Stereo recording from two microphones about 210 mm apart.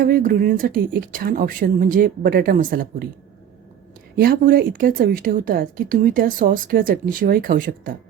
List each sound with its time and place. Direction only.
0.0 s speech: 40° right (ahead or behind)
4.2 s speech: 45° right (ahead or behind)